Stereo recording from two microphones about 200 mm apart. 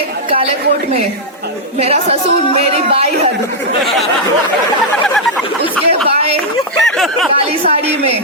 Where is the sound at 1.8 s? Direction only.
30° right (ahead or behind).